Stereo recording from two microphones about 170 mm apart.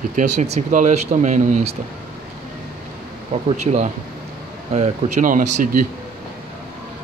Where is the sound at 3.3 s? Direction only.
45° right (ahead or behind).